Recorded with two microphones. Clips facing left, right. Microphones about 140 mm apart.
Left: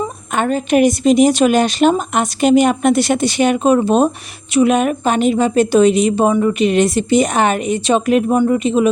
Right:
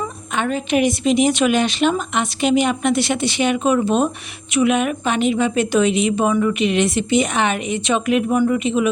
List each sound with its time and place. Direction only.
0.3 s a woman's voice: 40° left (ahead or behind)